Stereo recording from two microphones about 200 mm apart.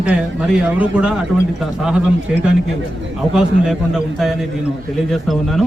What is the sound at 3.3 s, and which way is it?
Speech, centre (ahead or behind).